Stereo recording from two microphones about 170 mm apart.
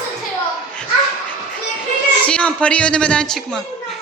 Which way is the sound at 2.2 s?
5° left (ahead or behind).